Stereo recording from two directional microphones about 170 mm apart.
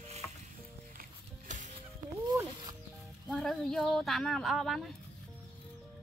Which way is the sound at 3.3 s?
5° left (ahead or behind).